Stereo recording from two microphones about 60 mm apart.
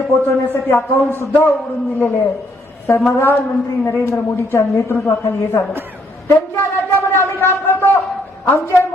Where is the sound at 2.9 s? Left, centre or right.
Left.